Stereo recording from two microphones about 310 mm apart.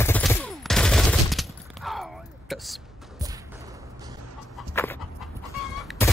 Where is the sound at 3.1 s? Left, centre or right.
Centre.